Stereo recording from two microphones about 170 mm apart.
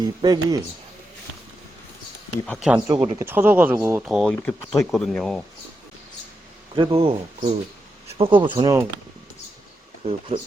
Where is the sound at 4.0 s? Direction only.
5° right (ahead or behind).